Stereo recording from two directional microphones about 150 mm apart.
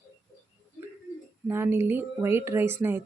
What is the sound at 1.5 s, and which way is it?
Speech, 15° right (ahead or behind).